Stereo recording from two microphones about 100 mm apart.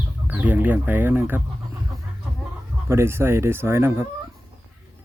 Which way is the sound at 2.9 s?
25° right (ahead or behind).